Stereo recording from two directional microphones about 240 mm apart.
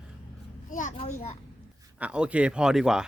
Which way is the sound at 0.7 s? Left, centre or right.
Left.